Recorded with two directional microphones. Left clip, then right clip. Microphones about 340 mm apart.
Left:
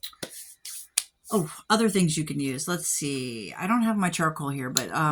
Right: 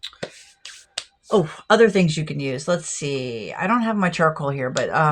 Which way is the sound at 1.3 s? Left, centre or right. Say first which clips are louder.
Right 8 dB; left.